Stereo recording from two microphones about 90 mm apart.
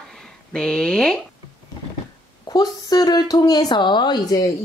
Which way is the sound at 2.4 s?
50° left (ahead or behind).